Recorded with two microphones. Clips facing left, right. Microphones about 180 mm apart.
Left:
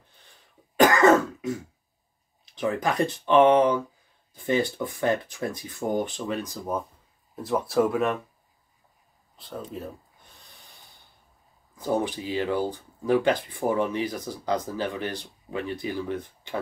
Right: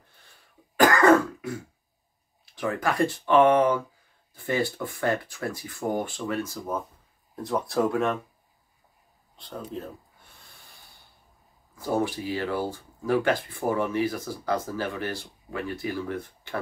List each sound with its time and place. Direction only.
0.7 s throat clearing: 20° left (ahead or behind)
2.4 s speech: 20° left (ahead or behind)
7.3 s speech: 5° left (ahead or behind)
9.4 s speech: centre (ahead or behind)
11.8 s speech: 20° left (ahead or behind)